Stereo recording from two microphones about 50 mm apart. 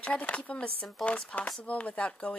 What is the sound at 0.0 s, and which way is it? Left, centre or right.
Speech, left.